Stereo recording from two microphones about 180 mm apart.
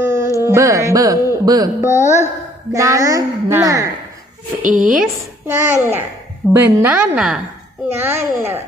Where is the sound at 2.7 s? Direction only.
15° right (ahead or behind).